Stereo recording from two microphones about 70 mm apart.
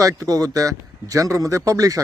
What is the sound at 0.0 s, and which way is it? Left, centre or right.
Speech, right.